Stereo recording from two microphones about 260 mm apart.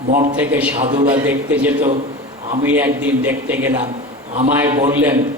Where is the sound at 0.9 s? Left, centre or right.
Centre.